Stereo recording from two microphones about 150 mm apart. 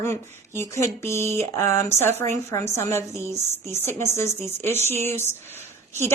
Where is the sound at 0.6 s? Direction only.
20° left (ahead or behind).